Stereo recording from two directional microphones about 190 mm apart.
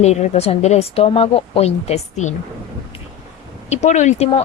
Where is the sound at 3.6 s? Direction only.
35° left (ahead or behind).